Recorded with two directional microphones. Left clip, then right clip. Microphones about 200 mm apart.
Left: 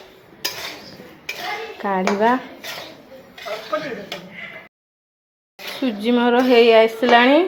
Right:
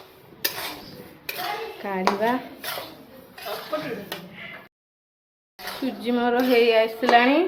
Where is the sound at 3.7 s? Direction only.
Centre (ahead or behind).